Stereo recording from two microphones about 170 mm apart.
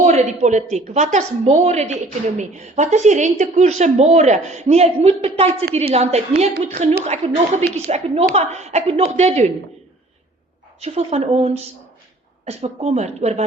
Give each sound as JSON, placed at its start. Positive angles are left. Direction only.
{"t": 0.0, "sound": "a woman's voice", "side_deg": -40}
{"t": 10.8, "sound": "speech", "side_deg": -40}